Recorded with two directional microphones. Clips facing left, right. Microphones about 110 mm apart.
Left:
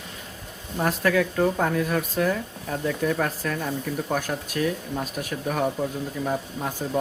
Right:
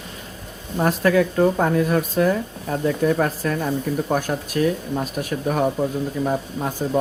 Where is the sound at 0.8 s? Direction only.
35° right (ahead or behind).